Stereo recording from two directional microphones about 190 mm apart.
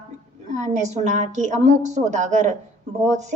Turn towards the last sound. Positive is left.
turn(degrees=-40)  # may be behind; listen again after turning